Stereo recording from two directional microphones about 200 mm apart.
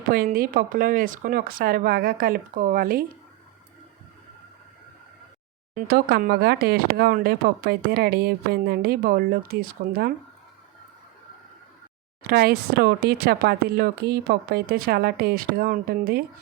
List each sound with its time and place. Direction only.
0.1 s speech: 45° right (ahead or behind)
5.7 s speech: 50° right (ahead or behind)
12.2 s speech: 50° right (ahead or behind)